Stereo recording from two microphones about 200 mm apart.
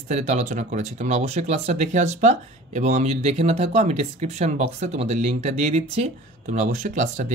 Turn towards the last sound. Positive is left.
turn(degrees=-40)  # may be behind; listen again after turning